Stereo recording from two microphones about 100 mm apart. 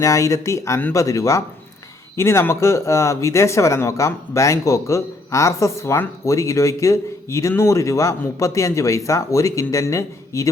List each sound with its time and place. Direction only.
0.0 s speech: 30° left (ahead or behind)